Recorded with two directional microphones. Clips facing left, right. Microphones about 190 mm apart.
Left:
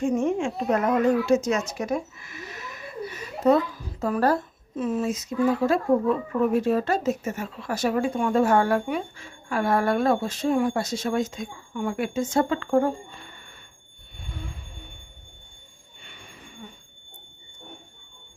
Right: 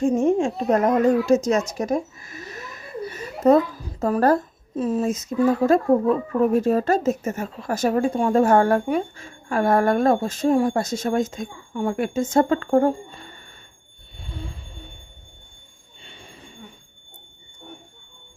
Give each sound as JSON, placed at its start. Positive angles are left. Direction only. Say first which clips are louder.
{"t": 0.2, "sound": "a child's voice", "louder": "right 5 dB", "side_deg": -35}
{"t": 1.7, "sound": "a sound", "louder": "right 4 dB", "side_deg": -40}
{"t": 4.0, "sound": "speech", "louder": "right 4 dB", "side_deg": -45}
{"t": 16.0, "sound": "train", "louder": "right 3 dB", "side_deg": -25}